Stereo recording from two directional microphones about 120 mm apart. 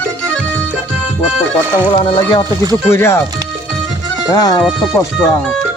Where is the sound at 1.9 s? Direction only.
50° left (ahead or behind).